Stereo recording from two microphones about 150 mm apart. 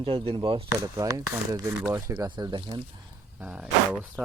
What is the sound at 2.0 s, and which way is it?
Speech, 25° right (ahead or behind).